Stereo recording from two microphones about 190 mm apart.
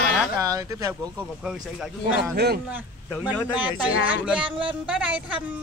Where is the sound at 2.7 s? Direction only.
10° right (ahead or behind).